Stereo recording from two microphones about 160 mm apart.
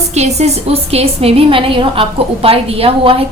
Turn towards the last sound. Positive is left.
turn(degrees=-35)  # may be behind; listen again after turning